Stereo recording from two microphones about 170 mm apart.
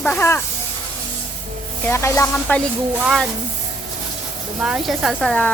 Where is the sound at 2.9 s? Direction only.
Centre (ahead or behind).